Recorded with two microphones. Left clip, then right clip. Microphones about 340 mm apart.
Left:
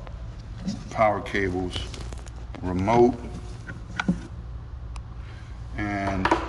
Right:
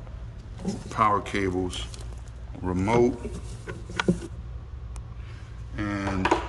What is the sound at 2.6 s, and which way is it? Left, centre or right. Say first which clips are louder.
Speech: left 3 dB; centre.